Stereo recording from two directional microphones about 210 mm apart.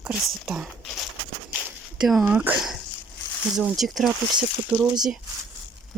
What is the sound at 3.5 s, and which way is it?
Speech, centre (ahead or behind).